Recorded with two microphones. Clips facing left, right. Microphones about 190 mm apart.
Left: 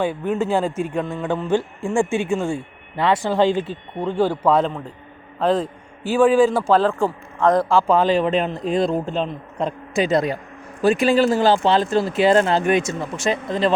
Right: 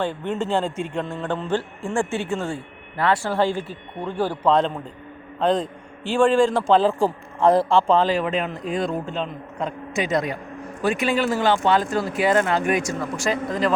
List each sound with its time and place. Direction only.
0.0 s a man's voice: 10° left (ahead or behind)
4.4 s a man's voice: 5° left (ahead or behind)
7.9 s a man's voice: 20° left (ahead or behind)